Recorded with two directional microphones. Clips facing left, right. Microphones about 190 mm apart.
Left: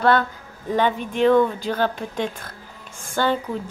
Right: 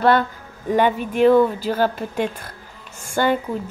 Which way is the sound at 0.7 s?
10° right (ahead or behind).